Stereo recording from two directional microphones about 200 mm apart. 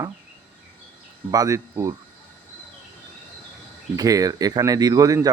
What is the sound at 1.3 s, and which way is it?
Speech, 15° right (ahead or behind).